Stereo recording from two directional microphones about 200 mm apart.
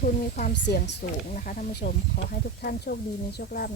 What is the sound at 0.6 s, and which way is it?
Speech, 60° left (ahead or behind).